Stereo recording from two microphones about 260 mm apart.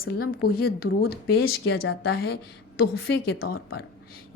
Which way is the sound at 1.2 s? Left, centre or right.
Left.